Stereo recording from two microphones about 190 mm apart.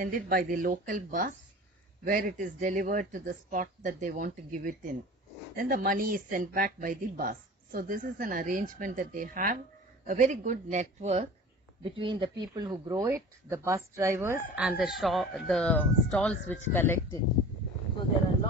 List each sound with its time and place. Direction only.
0.0 s speech: 50° right (ahead or behind); by 17.2 s 10° left (ahead or behind)